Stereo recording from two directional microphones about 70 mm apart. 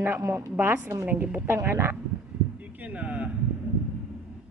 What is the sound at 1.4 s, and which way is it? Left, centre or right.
Speech, right.